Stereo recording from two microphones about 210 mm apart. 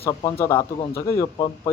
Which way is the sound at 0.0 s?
20° left (ahead or behind).